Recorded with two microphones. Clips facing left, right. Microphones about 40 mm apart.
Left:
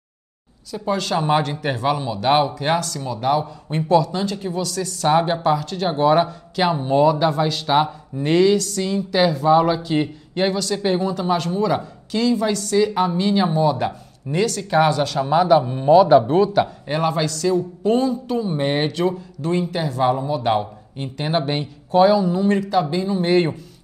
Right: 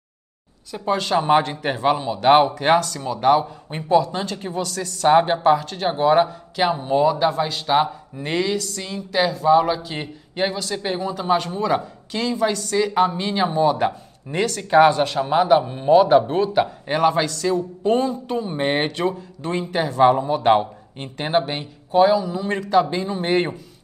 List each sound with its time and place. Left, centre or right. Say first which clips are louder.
0.7 s speech: right 1 dB; right
5.1 s speech: right 2 dB; right
5.9 s speech: even; centre
11.1 s speech: even; right
15.1 s speech: left 1 dB; centre
15.9 s speech: left 2 dB; right
16.6 s speech: right 3 dB; right
21.5 s speech: left 4 dB; centre
22.2 s speech: left 6 dB; left
22.6 s speech: right 1 dB; right